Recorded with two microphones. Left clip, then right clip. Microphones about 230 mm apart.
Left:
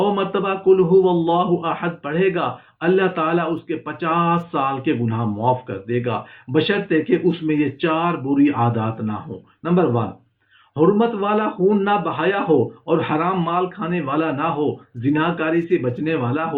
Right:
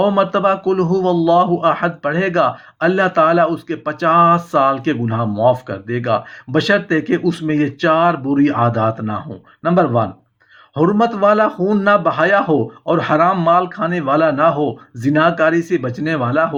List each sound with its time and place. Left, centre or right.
0.0 s speech: right